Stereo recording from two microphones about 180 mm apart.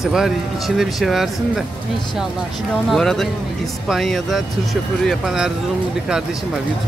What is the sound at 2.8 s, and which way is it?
Speech, centre (ahead or behind).